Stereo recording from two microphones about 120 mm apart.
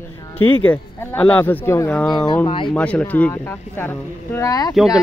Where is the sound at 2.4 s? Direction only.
45° left (ahead or behind).